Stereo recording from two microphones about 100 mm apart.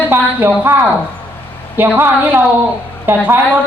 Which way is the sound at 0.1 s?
20° right (ahead or behind).